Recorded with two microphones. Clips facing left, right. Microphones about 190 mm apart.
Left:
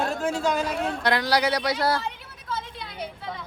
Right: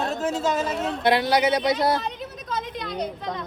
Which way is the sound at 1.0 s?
20° right (ahead or behind).